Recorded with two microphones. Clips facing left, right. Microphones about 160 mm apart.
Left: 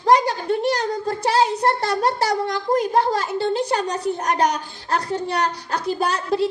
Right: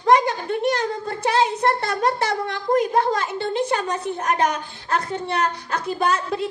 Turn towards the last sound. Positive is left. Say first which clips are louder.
# left 1 dB
turn(degrees=35)  # may be behind; listen again after turning